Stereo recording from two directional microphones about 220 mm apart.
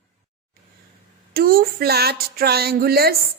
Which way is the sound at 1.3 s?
45° right (ahead or behind).